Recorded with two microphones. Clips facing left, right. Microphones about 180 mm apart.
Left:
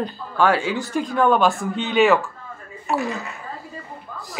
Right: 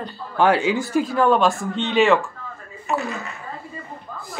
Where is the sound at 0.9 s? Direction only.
5° right (ahead or behind).